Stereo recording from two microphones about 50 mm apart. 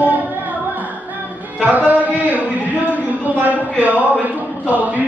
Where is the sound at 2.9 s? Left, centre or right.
Right.